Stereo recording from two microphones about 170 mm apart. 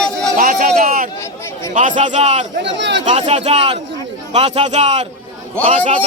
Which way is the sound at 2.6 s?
90° right.